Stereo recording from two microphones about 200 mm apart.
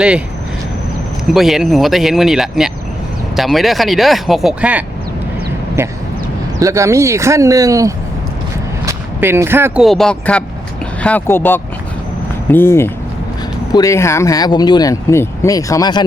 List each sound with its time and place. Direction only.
1.3 s speech: centre (ahead or behind)
6.6 s speech: 15° right (ahead or behind)
9.8 s speech: centre (ahead or behind); by 16.0 s 20° left (ahead or behind)